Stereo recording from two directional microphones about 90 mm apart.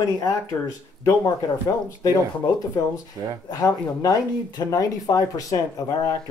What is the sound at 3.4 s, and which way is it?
Speech, 45° left (ahead or behind).